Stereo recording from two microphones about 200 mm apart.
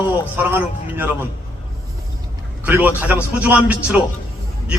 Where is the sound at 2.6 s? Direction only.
10° right (ahead or behind).